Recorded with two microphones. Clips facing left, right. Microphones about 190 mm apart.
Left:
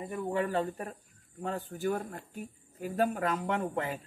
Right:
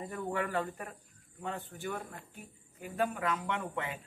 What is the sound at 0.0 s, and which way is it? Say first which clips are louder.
Speech: left 3 dB; 20° left (ahead or behind).